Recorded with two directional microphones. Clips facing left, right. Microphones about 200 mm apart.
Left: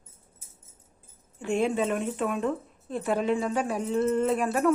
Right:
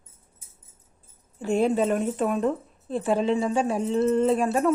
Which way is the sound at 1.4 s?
35° right (ahead or behind).